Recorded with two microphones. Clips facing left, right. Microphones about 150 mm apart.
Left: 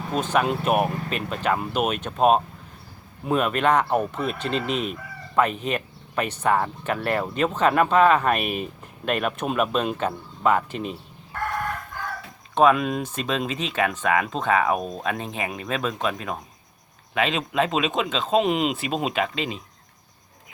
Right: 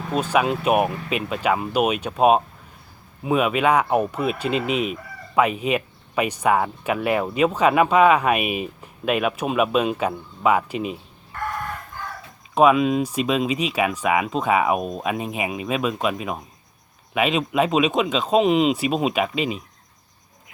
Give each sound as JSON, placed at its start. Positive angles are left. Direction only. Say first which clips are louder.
{"t": 0.1, "sound": "speech", "louder": "right 2 dB", "side_deg": -10}
{"t": 12.5, "sound": "speech", "louder": "right 3 dB", "side_deg": -5}
{"t": 18.3, "sound": "speech", "louder": "right 4 dB", "side_deg": 0}